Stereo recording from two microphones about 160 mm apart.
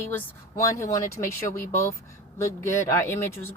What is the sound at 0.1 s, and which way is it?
Speech, 20° left (ahead or behind).